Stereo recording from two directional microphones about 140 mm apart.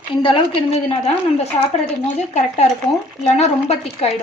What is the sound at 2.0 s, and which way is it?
Speech, 55° left (ahead or behind).